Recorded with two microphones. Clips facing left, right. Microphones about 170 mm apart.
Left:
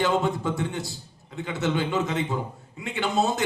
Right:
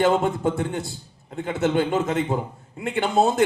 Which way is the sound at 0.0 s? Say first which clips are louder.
Right 4 dB; 50° right (ahead or behind).